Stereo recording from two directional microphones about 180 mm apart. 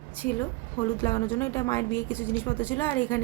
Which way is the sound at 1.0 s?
15° left (ahead or behind).